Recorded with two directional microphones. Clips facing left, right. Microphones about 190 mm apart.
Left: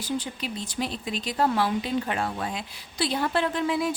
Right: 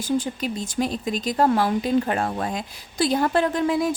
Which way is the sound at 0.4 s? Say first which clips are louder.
Right 6 dB; 45° right (ahead or behind).